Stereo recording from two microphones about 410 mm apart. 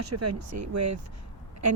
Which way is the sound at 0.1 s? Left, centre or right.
Right.